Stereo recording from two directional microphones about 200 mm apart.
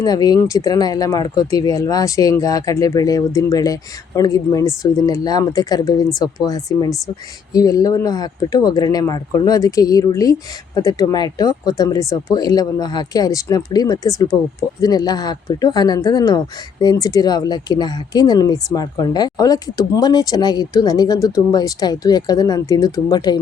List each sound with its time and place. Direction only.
0.0 s speech: 20° left (ahead or behind)